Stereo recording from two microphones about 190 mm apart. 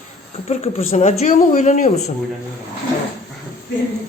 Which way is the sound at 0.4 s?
35° left (ahead or behind).